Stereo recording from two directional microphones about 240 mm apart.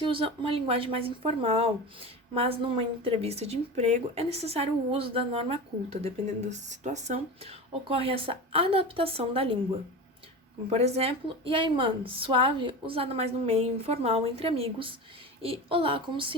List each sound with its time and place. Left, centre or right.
0.0 s speech: right
10.7 s speech: right